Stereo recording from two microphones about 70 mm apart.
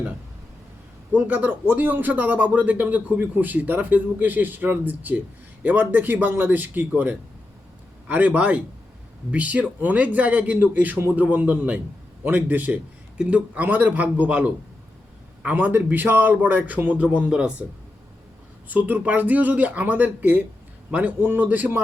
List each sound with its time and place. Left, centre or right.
1.3 s speech: right
18.7 s speech: right